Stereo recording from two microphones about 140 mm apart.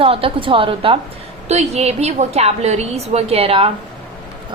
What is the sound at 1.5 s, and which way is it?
A woman's voice, 50° right (ahead or behind).